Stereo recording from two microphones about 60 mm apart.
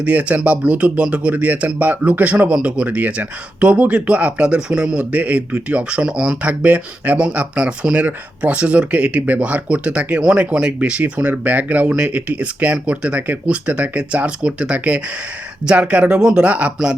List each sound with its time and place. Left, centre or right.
0.0 s speech: right